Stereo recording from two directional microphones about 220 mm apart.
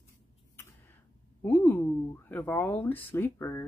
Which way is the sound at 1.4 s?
10° left (ahead or behind).